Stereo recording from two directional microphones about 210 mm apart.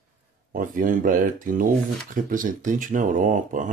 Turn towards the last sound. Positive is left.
turn(degrees=-35)  # may be behind; listen again after turning